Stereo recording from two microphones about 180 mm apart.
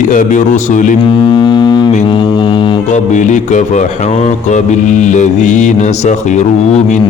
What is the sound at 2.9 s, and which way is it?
Music, 45° left (ahead or behind).